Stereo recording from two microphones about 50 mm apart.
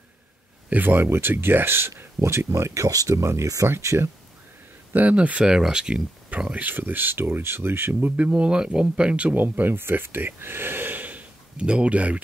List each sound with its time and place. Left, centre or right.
0.7 s speech: right
5.1 s speech: right
5.4 s speech: centre
6.5 s speech: right
8.2 s speech: right
9.4 s speech: right
11.5 s speech: right